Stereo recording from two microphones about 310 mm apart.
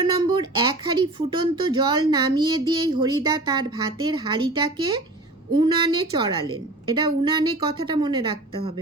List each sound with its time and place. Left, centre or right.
0.0 s a woman's voice: centre